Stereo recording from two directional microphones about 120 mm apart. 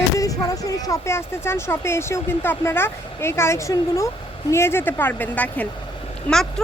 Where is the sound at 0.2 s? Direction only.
30° left (ahead or behind); by 5.6 s 15° left (ahead or behind).